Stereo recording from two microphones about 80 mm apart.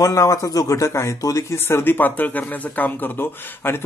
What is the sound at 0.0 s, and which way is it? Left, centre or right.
Speech, left.